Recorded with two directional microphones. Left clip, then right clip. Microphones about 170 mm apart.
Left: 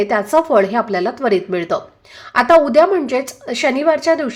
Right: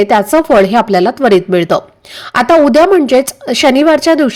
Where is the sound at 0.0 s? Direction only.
30° right (ahead or behind).